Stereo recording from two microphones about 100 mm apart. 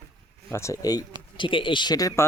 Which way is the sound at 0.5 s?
30° left (ahead or behind).